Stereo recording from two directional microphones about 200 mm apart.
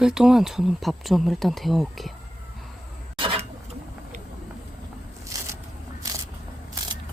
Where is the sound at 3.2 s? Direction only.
25° right (ahead or behind).